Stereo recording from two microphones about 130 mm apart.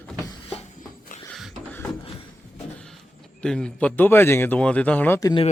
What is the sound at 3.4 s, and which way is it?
Speech, 5° left (ahead or behind).